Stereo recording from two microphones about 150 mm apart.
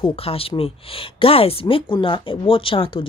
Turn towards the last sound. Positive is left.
turn(degrees=35)  # may be behind; listen again after turning